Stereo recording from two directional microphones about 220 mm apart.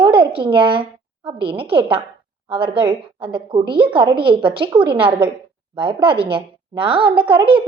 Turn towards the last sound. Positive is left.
turn(degrees=-25)  # may be behind; listen again after turning